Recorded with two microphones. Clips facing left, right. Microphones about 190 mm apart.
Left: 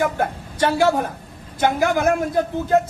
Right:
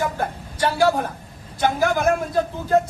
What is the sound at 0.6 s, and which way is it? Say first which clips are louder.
Speech: left 1 dB; 20° left (ahead or behind).